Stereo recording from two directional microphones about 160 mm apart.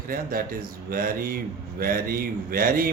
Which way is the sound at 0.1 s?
65° right (ahead or behind).